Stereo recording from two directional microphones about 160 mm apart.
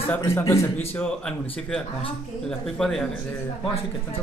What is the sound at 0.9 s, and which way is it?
Speech, 5° left (ahead or behind).